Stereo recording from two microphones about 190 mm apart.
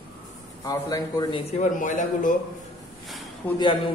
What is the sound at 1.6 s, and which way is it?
Speech, 40° left (ahead or behind).